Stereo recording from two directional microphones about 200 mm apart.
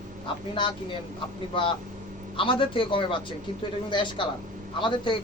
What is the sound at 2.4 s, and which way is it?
A man's voice, 25° left (ahead or behind).